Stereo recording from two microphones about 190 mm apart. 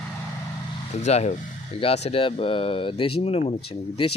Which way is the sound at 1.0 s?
35° left (ahead or behind).